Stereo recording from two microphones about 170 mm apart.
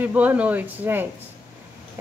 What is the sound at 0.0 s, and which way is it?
A woman's voice, 10° right (ahead or behind).